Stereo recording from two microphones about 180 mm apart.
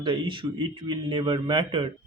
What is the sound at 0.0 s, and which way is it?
Speech, 25° right (ahead or behind).